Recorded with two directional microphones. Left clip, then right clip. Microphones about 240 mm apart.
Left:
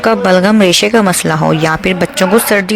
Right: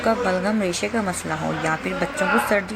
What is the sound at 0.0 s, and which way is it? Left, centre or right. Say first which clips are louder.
Speech: left 11 dB; left.